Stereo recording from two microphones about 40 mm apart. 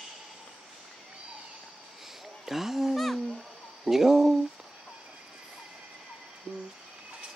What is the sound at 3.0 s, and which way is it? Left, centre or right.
Hoot, centre.